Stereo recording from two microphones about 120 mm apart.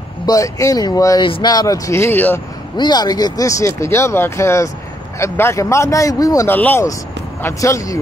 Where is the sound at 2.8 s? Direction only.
35° left (ahead or behind).